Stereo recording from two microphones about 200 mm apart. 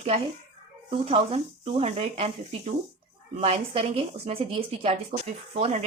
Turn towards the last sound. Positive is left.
turn(degrees=-30)  # may be behind; listen again after turning